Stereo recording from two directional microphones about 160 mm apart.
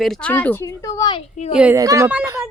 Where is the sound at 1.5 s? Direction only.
5° right (ahead or behind).